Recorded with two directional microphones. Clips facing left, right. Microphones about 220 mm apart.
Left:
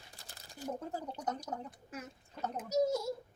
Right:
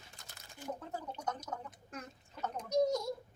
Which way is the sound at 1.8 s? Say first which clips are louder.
Left 2 dB; 5° left (ahead or behind).